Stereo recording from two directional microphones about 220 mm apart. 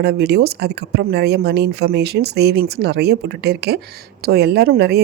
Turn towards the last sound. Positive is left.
turn(degrees=-45)  # may be behind; listen again after turning